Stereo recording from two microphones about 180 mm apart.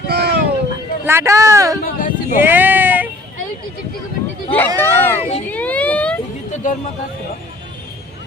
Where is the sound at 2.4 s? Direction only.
10° right (ahead or behind).